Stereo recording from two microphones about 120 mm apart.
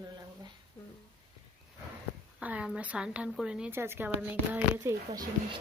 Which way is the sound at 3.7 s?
20° right (ahead or behind).